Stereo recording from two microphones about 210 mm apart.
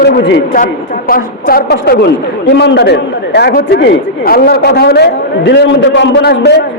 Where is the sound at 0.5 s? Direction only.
40° left (ahead or behind).